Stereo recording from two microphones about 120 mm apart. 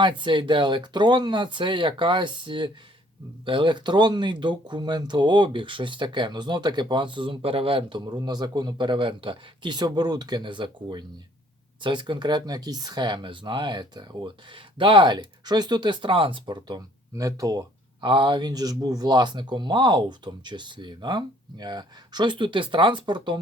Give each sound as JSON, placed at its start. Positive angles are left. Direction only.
{"t": 0.0, "sound": "speech", "side_deg": -40}